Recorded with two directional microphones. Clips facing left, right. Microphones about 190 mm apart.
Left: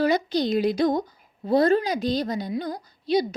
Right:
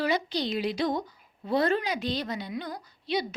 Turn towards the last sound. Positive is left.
turn(degrees=40)  # may be behind; listen again after turning